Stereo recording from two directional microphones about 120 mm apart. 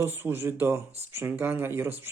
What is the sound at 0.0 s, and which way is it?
Speech, 20° right (ahead or behind).